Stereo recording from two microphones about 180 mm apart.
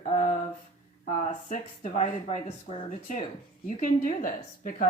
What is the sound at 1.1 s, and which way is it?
Speech, 40° left (ahead or behind).